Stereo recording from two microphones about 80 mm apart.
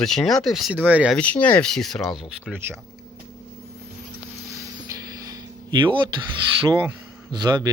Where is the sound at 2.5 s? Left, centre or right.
Right.